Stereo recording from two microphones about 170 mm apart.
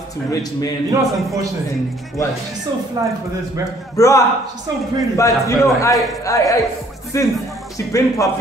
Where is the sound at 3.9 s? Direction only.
20° left (ahead or behind).